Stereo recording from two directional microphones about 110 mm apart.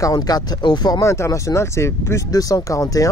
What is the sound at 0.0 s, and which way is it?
Speech, 35° left (ahead or behind).